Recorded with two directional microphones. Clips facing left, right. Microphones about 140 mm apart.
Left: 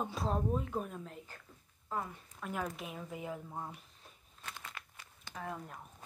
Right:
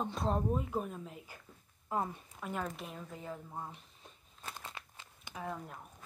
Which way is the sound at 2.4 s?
Centre (ahead or behind).